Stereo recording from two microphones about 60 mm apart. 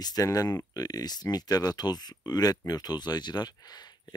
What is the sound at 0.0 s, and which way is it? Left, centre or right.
Speech, left.